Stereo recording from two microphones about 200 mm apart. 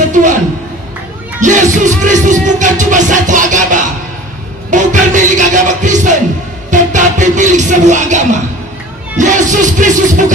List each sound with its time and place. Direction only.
1.4 s music: 40° right (ahead or behind)